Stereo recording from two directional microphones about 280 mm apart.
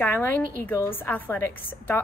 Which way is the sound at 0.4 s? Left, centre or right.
Right.